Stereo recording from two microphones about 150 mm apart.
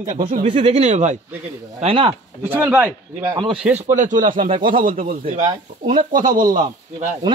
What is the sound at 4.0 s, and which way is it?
Speech, 60° right (ahead or behind).